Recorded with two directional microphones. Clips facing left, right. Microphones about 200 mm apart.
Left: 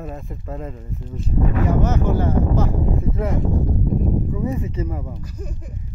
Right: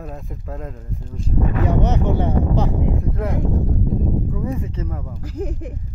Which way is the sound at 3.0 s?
Centre (ahead or behind).